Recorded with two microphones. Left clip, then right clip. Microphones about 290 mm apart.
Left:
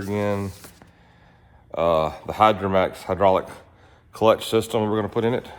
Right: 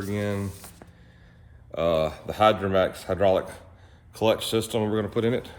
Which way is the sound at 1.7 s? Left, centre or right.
Centre.